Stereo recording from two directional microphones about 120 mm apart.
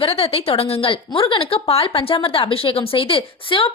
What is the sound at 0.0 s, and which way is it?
Speech, 55° left (ahead or behind).